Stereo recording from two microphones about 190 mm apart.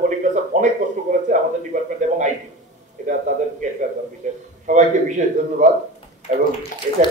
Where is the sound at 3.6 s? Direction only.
40° right (ahead or behind).